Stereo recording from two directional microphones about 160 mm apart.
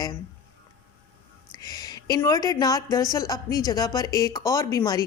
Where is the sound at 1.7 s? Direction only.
25° left (ahead or behind).